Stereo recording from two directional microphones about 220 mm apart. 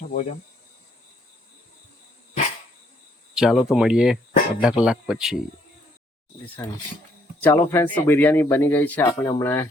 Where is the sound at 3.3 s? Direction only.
Centre (ahead or behind).